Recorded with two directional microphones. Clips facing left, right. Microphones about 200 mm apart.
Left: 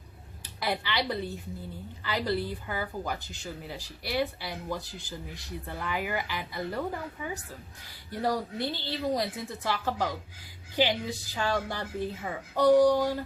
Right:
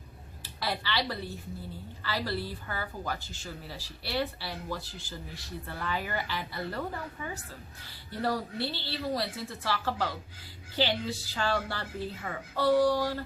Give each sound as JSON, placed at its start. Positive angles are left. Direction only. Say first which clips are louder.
{"t": 0.4, "sound": "a woman's voice", "louder": "left 2 dB", "side_deg": 15}